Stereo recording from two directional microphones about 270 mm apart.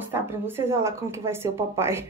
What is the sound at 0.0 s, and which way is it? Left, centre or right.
A woman's voice, centre.